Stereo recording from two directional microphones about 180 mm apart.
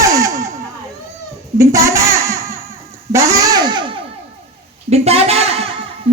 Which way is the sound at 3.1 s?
15° right (ahead or behind).